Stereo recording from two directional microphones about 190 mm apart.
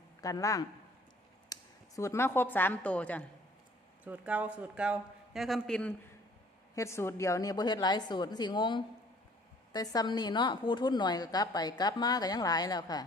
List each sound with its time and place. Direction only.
0.2 s speech: 20° left (ahead or behind)
1.5 s a sound: 20° left (ahead or behind)
2.0 s a woman's voice: 15° left (ahead or behind)
4.0 s speech: 10° right (ahead or behind)
6.7 s a woman's voice: 15° left (ahead or behind)